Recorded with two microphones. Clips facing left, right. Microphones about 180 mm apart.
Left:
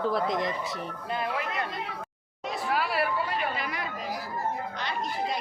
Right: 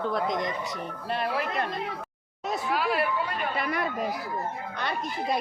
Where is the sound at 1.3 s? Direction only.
40° right (ahead or behind).